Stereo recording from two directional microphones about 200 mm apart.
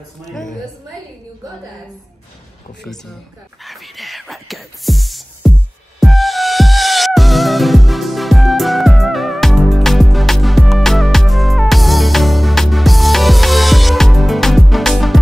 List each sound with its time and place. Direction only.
0.3 s a woman's voice: centre (ahead or behind)
3.6 s speech: centre (ahead or behind)
5.9 s music: centre (ahead or behind)